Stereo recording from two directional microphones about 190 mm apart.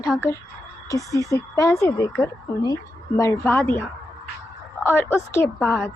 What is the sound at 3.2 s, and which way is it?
Speech, 15° left (ahead or behind).